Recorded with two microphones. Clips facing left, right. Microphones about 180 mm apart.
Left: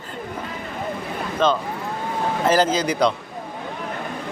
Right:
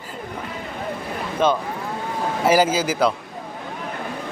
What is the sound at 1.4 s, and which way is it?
Speech, 10° right (ahead or behind).